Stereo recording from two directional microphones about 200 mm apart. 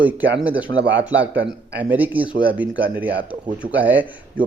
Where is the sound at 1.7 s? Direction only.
10° right (ahead or behind).